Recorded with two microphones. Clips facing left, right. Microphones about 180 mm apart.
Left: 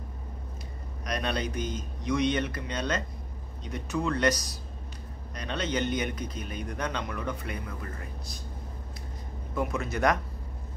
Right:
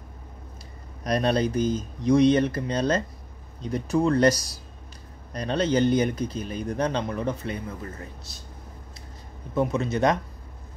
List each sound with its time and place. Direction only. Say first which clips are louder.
1.0 s a man's voice: right 8 dB; 35° right (ahead or behind)
9.6 s speech: right 5 dB; 20° right (ahead or behind)